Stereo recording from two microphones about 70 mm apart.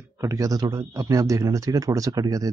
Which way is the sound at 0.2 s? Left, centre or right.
Right.